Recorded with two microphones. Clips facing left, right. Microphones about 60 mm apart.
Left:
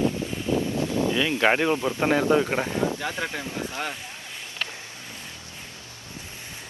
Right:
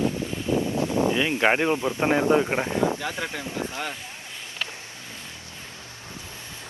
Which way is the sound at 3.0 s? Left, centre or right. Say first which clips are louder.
Left 1 dB; centre.